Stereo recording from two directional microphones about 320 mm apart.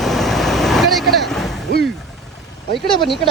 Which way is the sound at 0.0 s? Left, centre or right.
Centre.